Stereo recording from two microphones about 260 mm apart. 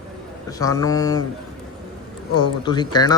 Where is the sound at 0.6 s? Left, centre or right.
Centre.